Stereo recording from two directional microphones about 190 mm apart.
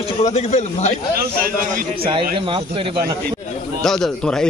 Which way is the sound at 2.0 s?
25° right (ahead or behind).